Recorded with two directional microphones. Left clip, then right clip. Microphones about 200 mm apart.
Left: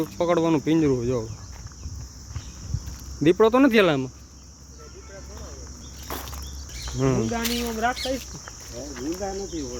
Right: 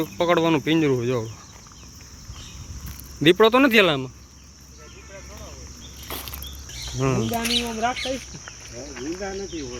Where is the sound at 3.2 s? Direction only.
Centre (ahead or behind).